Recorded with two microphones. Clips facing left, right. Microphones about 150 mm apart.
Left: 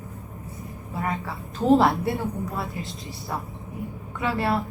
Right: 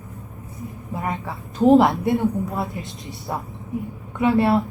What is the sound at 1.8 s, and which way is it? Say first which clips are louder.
Speech: right 4 dB; 20° right (ahead or behind).